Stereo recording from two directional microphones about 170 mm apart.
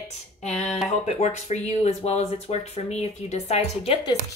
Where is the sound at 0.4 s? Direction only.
40° left (ahead or behind).